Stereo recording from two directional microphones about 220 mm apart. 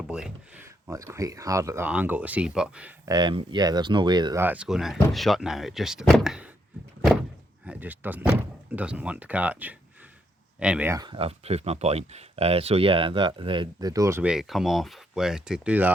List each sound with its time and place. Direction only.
0.1 s speech: 5° right (ahead or behind)
3.1 s speech: 20° right (ahead or behind); by 6.5 s centre (ahead or behind)
7.6 s speech: 5° right (ahead or behind)